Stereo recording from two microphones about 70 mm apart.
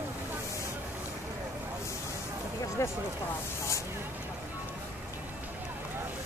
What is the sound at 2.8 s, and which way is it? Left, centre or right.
Speech, left.